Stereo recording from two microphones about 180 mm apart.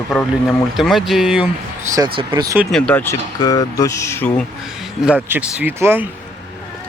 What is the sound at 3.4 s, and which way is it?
Speech, 20° left (ahead or behind).